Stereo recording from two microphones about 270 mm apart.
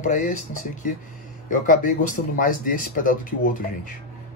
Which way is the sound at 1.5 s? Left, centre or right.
Left.